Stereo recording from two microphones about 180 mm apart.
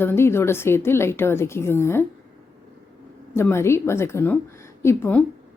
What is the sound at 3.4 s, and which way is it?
A woman's voice, 15° left (ahead or behind).